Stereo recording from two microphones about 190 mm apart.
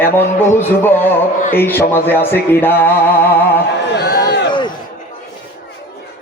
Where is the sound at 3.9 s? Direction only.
55° left (ahead or behind).